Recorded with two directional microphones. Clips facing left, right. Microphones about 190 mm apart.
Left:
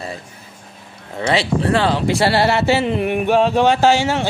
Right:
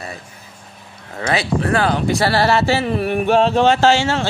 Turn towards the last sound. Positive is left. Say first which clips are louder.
# even
turn(degrees=15)  # may be behind; listen again after turning